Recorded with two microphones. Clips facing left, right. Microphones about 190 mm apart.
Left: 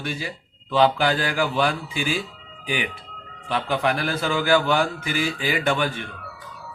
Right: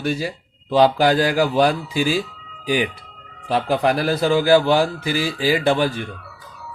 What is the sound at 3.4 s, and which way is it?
A man's voice, 35° right (ahead or behind).